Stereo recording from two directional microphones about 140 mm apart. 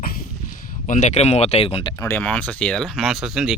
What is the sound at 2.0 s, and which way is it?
Speech, 15° left (ahead or behind).